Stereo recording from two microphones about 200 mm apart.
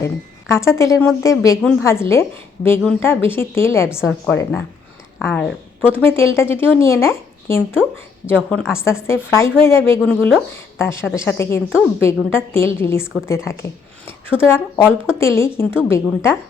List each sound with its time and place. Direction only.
0.0 s a woman's voice: 15° left (ahead or behind)
10.0 s a woman's voice: centre (ahead or behind)